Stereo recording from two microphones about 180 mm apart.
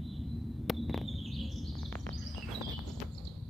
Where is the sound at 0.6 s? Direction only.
Centre (ahead or behind).